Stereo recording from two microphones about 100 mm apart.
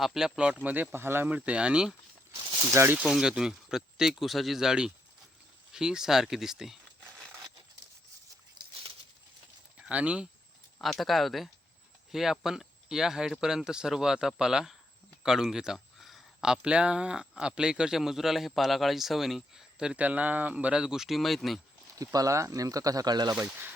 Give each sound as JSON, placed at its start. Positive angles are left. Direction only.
{"t": 0.0, "sound": "speech", "side_deg": -5}
{"t": 1.4, "sound": "speech", "side_deg": -10}
{"t": 2.7, "sound": "speech", "side_deg": -20}
{"t": 3.1, "sound": "speech", "side_deg": -5}
{"t": 8.6, "sound": "a sound", "side_deg": -50}
{"t": 9.7, "sound": "speech", "side_deg": -10}
{"t": 10.8, "sound": "speech", "side_deg": 5}
{"t": 21.9, "sound": "speech", "side_deg": -35}
{"t": 23.3, "sound": "speech", "side_deg": -15}